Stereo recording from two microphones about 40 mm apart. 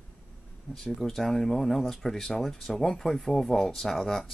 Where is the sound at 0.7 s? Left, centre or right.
Centre.